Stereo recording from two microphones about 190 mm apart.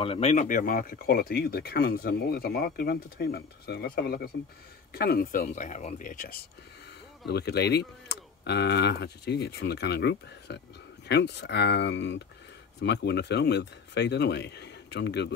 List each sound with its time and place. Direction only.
0.0 s speech: 30° left (ahead or behind); by 6.4 s 45° left (ahead or behind)
7.2 s speech: 60° left (ahead or behind)